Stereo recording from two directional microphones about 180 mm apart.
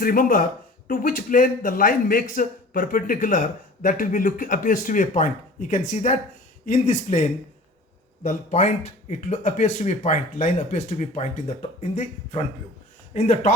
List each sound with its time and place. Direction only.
0.0 s a man's voice: 50° left (ahead or behind)